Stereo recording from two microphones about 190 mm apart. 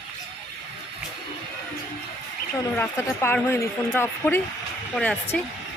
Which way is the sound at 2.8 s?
10° left (ahead or behind).